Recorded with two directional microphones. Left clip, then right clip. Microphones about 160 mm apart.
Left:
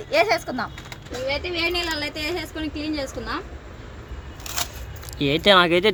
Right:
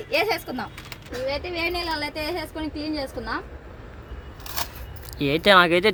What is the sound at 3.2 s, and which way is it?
Speech, 25° left (ahead or behind).